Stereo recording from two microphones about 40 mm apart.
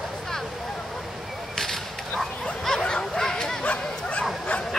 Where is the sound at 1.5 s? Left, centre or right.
Centre.